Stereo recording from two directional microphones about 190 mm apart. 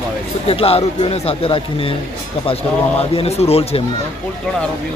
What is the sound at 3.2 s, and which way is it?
Speech, 35° left (ahead or behind).